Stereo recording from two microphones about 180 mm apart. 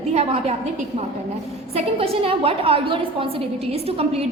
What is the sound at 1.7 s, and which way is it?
A woman's voice, 35° right (ahead or behind).